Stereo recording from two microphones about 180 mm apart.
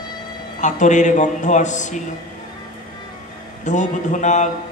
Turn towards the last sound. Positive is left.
turn(degrees=40)  # may be behind; listen again after turning